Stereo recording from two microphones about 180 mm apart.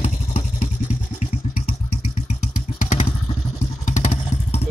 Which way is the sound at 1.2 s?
35° left (ahead or behind).